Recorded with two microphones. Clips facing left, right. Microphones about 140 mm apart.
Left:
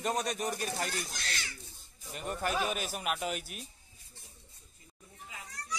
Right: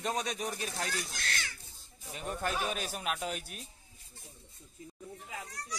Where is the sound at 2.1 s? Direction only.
Centre (ahead or behind).